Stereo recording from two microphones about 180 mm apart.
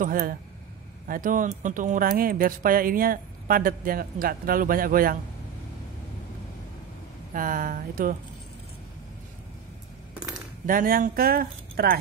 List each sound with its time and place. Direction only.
0.0 s speech: 50° right (ahead or behind)
7.3 s speech: 50° right (ahead or behind)
10.7 s speech: 50° right (ahead or behind)